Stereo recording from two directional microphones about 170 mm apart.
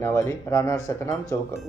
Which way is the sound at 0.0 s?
15° left (ahead or behind).